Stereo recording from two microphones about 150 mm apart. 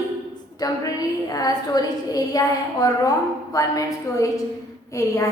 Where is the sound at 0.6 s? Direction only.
25° left (ahead or behind).